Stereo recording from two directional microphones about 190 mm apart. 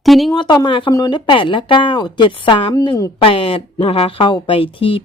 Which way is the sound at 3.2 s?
30° left (ahead or behind).